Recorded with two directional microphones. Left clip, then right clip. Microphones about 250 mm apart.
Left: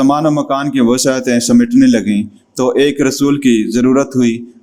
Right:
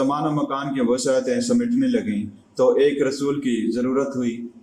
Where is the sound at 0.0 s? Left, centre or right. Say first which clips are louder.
Left 9 dB; left.